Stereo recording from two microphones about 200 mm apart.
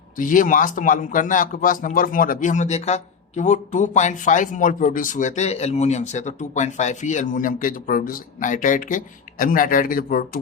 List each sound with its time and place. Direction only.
0.2 s speech: 40° left (ahead or behind)